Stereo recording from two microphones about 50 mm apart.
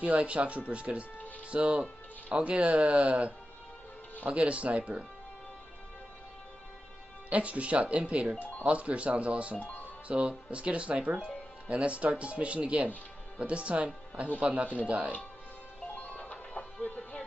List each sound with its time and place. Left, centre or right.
0.0 s speech: right
4.5 s speech: right
7.2 s speech: right
9.6 s speech: left
10.0 s speech: right
16.0 s music: left